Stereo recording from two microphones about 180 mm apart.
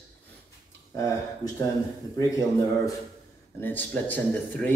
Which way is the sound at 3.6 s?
10° left (ahead or behind).